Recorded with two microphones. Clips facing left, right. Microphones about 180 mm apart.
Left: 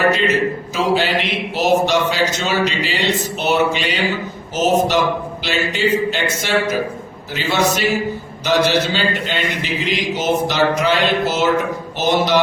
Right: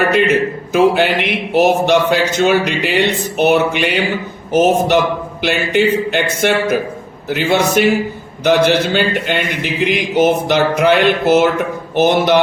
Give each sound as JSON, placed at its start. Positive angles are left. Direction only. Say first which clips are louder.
{"t": 0.1, "sound": "a man's voice", "louder": "right 4 dB", "side_deg": -60}